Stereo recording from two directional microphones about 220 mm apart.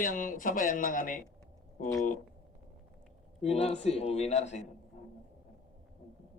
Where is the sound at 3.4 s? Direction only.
30° left (ahead or behind).